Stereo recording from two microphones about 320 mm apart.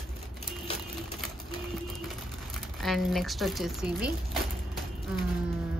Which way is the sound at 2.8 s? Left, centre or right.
Centre.